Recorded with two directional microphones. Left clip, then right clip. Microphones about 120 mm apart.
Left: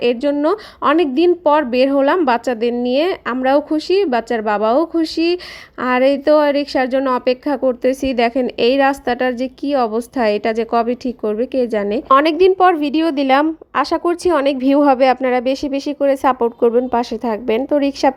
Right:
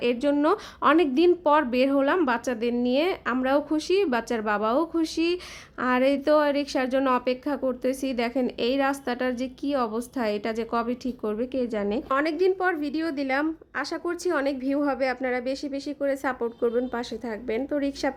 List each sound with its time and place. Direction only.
0.0 s a woman's voice: 25° left (ahead or behind); by 14.0 s 55° left (ahead or behind)
14.0 s speech: 45° left (ahead or behind)